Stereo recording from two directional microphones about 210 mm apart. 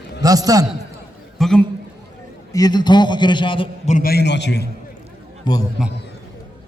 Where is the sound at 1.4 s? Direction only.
5° left (ahead or behind).